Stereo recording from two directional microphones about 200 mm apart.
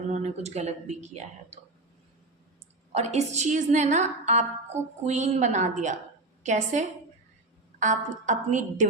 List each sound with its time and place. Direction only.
0.1 s a woman's voice: 35° right (ahead or behind)
2.9 s a woman's voice: 35° right (ahead or behind)